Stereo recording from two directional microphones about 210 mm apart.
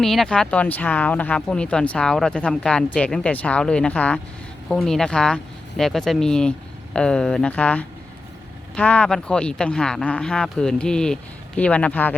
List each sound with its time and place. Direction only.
0.0 s speech: centre (ahead or behind)